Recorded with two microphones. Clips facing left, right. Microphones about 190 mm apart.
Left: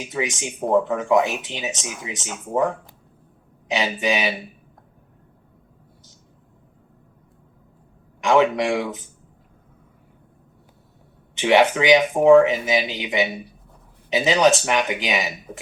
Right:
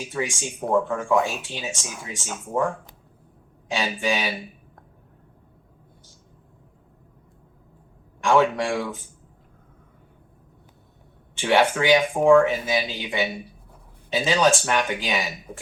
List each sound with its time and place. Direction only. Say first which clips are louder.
0.0 s speech: left 2 dB; 15° left (ahead or behind)
8.2 s speech: left 2 dB; 15° left (ahead or behind)
11.3 s speech: left 3 dB; 15° left (ahead or behind)